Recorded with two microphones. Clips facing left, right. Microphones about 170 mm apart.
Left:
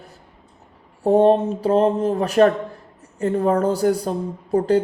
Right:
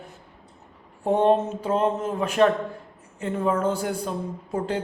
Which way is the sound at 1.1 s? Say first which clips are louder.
Left 5 dB; 35° left (ahead or behind).